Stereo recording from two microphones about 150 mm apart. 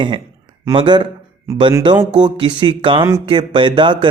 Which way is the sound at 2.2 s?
30° right (ahead or behind).